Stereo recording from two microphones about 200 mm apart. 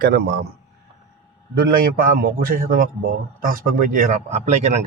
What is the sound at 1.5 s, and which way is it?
A man's voice, 45° right (ahead or behind).